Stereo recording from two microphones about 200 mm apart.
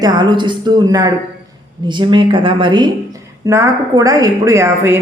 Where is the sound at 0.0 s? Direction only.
20° right (ahead or behind).